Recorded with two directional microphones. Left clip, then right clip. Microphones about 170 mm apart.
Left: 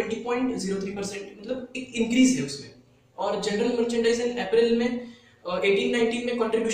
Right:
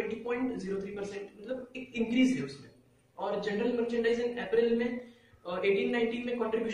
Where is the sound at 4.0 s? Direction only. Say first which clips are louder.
Left 6 dB; 5° left (ahead or behind).